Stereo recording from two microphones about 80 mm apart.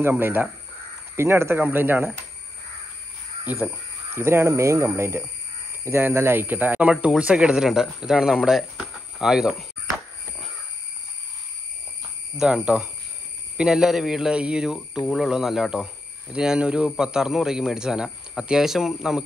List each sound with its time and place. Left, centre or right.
0.0 s speech: right
4.1 s speech: right; by 9.7 s centre
12.4 s speech: centre